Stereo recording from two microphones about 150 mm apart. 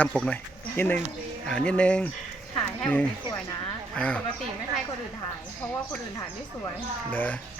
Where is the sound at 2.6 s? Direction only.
10° left (ahead or behind).